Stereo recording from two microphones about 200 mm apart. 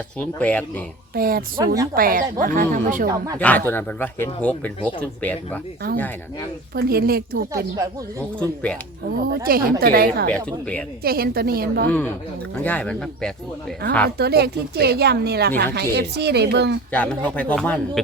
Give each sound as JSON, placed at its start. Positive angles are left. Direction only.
{"t": 0.2, "sound": "speech", "side_deg": 5}
{"t": 1.1, "sound": "a woman's voice", "side_deg": -45}
{"t": 1.5, "sound": "speech", "side_deg": -20}
{"t": 2.0, "sound": "a woman's voice", "side_deg": -45}
{"t": 3.3, "sound": "speech", "side_deg": 5}
{"t": 6.7, "sound": "a woman's voice", "side_deg": -50}
{"t": 8.4, "sound": "speech", "side_deg": 5}
{"t": 9.3, "sound": "a woman's voice", "side_deg": -50}
{"t": 10.3, "sound": "speech", "side_deg": 5}
{"t": 11.0, "sound": "a woman's voice", "side_deg": -50}
{"t": 11.9, "sound": "speech", "side_deg": 10}
{"t": 14.2, "sound": "a woman's voice", "side_deg": -55}
{"t": 16.9, "sound": "speech", "side_deg": 5}